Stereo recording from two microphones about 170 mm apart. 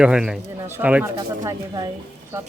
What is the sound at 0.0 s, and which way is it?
Speech, 5° right (ahead or behind).